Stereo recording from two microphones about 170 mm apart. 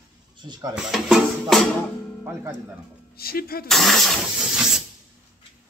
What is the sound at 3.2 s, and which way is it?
Speech, 60° left (ahead or behind).